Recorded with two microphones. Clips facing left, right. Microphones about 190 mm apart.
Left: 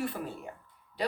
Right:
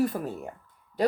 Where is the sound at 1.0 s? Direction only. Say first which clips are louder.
Right 8 dB; 45° right (ahead or behind).